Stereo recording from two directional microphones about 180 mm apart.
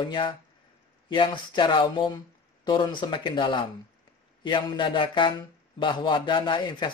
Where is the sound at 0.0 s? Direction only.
25° left (ahead or behind).